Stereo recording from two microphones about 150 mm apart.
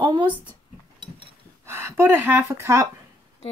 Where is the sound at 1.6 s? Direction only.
15° right (ahead or behind).